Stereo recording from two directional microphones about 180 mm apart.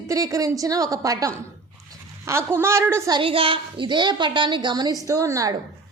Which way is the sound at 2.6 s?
15° right (ahead or behind).